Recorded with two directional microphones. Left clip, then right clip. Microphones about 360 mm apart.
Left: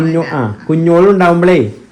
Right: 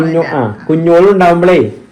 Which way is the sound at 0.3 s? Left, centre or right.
Centre.